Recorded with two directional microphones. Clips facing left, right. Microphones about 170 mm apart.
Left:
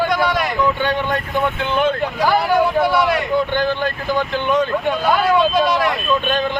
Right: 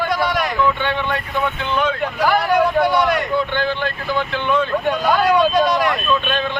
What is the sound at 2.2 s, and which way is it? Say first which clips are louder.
Speech: right 1 dB; 5° left (ahead or behind).